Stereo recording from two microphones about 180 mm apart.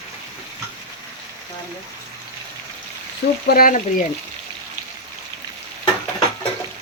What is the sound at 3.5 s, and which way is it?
Speech, 55° left (ahead or behind).